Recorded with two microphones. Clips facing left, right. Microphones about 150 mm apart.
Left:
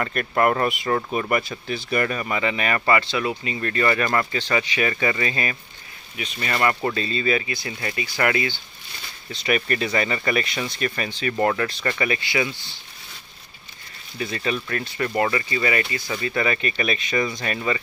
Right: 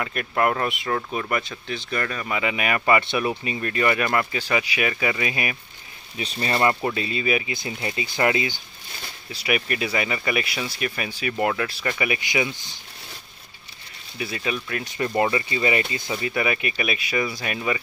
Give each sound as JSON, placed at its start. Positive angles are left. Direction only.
{"t": 0.0, "sound": "speech", "side_deg": -5}
{"t": 2.3, "sound": "speech", "side_deg": -10}
{"t": 3.0, "sound": "speech", "side_deg": -20}
{"t": 6.1, "sound": "speech", "side_deg": -30}
{"t": 9.3, "sound": "speech", "side_deg": -10}
{"t": 14.1, "sound": "speech", "side_deg": -10}